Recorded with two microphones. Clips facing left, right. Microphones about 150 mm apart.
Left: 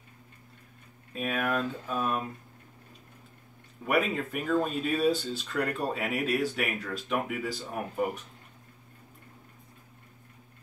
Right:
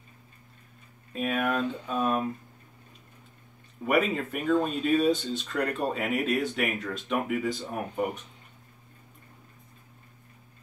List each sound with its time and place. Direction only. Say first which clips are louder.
1.1 s speech: right 2 dB; centre (ahead or behind)
3.8 s speech: right 2 dB; centre (ahead or behind)